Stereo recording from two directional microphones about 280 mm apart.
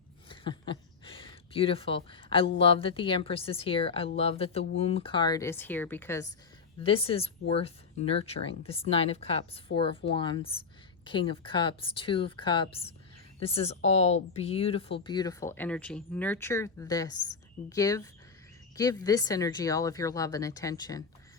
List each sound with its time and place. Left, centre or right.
0.3 s a sound: centre
2.3 s speech: centre
6.8 s speech: centre